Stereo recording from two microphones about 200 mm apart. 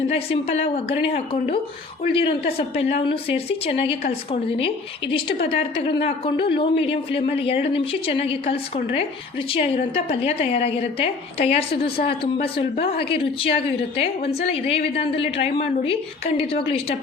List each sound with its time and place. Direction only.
0.1 s a woman's voice: 30° left (ahead or behind)